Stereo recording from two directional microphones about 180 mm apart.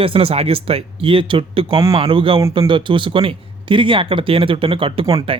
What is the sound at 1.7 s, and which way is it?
Speech, 20° right (ahead or behind).